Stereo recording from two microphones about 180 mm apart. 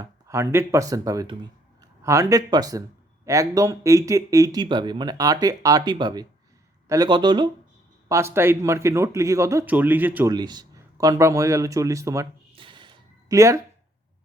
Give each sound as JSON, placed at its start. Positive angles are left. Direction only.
{"t": 0.0, "sound": "speech", "side_deg": -15}
{"t": 10.3, "sound": "speech", "side_deg": -25}
{"t": 12.5, "sound": "a sound", "side_deg": -25}